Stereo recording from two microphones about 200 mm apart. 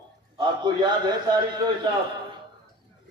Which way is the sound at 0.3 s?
20° right (ahead or behind).